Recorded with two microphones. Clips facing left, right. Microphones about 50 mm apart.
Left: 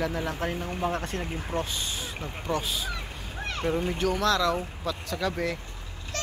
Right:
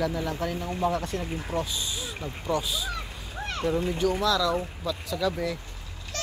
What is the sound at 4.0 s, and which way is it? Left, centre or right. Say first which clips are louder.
Speech: even; left.